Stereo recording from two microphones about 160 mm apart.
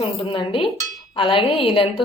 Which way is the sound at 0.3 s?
30° left (ahead or behind).